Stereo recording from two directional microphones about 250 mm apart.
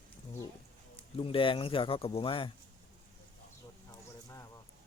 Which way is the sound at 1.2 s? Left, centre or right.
Left.